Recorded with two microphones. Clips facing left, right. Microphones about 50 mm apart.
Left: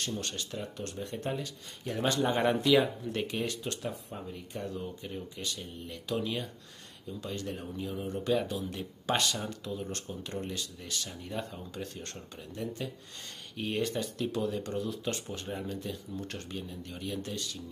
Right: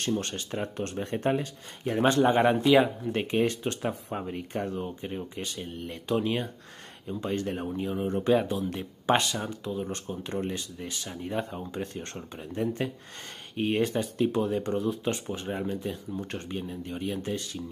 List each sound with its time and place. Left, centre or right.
0.0 s speech: right
1.4 s speech: right
4.6 s speech: right